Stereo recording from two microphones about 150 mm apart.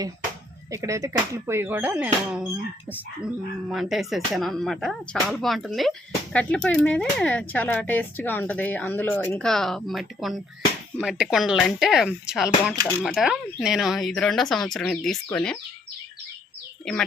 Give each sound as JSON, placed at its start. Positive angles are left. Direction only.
{"t": 0.7, "sound": "speech", "side_deg": -20}
{"t": 3.7, "sound": "speech", "side_deg": 0}
{"t": 16.8, "sound": "a child's voice", "side_deg": 5}